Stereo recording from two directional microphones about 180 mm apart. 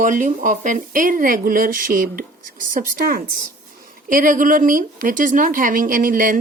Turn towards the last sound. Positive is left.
turn(degrees=-50)  # may be behind; listen again after turning